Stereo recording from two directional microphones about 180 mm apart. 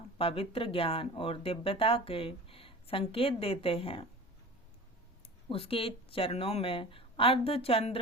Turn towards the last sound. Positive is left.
turn(degrees=30)  # may be behind; listen again after turning